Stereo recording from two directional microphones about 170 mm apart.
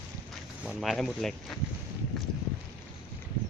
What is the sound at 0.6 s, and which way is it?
Speech, centre (ahead or behind).